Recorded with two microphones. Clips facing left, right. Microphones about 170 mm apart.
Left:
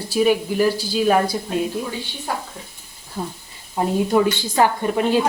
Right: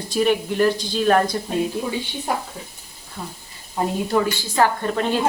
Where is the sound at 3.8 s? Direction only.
15° left (ahead or behind).